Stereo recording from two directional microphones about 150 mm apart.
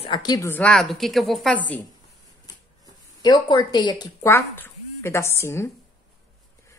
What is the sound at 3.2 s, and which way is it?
A woman's voice, 30° left (ahead or behind).